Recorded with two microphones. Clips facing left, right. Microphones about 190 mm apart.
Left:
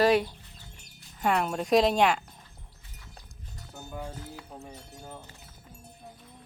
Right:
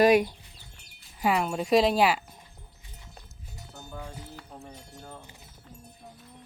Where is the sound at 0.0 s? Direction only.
15° right (ahead or behind).